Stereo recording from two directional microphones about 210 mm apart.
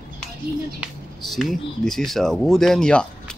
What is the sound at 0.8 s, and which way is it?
Speech, centre (ahead or behind).